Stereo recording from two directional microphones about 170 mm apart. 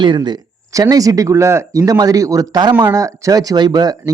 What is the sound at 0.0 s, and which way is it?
Speech, 25° right (ahead or behind).